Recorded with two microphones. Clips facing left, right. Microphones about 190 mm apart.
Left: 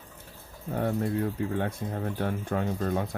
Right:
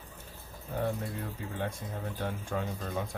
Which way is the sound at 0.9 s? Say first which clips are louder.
Left 7 dB; 60° left (ahead or behind).